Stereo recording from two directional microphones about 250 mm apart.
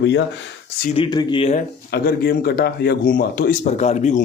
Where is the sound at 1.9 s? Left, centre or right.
Left.